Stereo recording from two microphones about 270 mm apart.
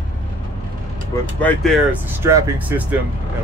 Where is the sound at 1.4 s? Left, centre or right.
Centre.